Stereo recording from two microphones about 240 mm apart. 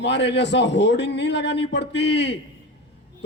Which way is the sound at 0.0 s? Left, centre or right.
Left.